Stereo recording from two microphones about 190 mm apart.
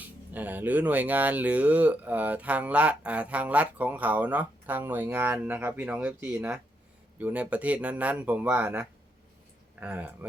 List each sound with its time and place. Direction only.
0.3 s speech: 10° right (ahead or behind)